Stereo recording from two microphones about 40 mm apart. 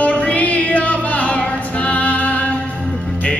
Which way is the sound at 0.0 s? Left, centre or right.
Left.